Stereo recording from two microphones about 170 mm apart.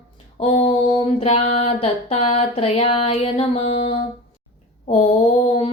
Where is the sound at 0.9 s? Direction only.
35° left (ahead or behind).